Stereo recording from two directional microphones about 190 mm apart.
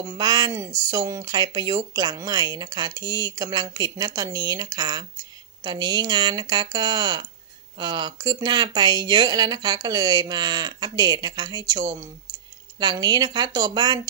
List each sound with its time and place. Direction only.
0.0 s speech: 20° right (ahead or behind)